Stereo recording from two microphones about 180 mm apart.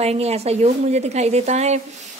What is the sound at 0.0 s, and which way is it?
A woman's voice, 35° right (ahead or behind).